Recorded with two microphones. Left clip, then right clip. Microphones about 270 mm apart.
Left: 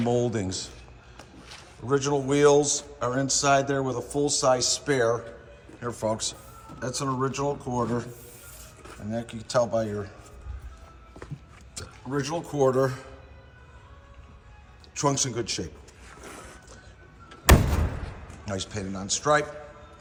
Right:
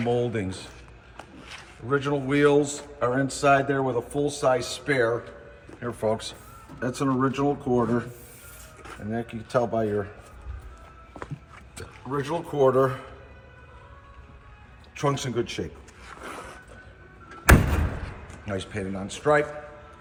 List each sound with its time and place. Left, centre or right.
0.0 s a man's voice: left
0.3 s speech: centre
1.9 s a man's voice: centre
11.7 s speech: centre
14.9 s a man's voice: centre
16.2 s a sound: centre
18.4 s a man's voice: centre